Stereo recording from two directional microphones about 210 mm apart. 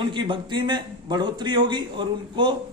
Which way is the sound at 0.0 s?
20° right (ahead or behind).